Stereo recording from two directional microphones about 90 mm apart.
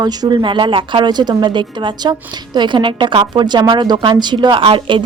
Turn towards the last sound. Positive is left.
turn(degrees=-75)  # may be behind; listen again after turning